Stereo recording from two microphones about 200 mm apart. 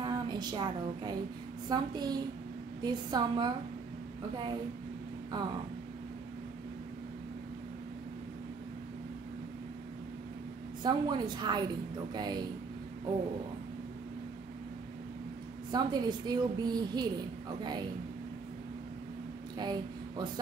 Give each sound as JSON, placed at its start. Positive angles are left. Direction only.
{"t": 0.0, "sound": "a woman's voice", "side_deg": -20}
{"t": 10.8, "sound": "a woman's voice", "side_deg": -20}
{"t": 15.7, "sound": "a woman's voice", "side_deg": -20}
{"t": 19.6, "sound": "speech", "side_deg": -20}